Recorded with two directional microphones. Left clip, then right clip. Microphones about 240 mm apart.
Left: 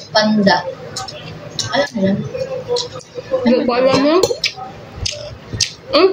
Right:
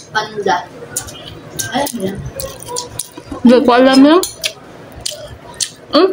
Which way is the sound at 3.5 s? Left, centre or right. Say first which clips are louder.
Right 6 dB; right.